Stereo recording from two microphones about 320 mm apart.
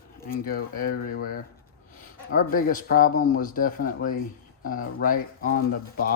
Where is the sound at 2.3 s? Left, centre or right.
Left.